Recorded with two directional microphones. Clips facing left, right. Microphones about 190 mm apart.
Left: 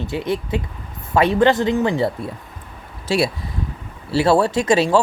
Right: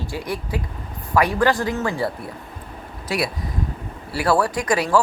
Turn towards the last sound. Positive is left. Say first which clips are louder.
# left 4 dB
turn(degrees=25)  # may be behind; listen again after turning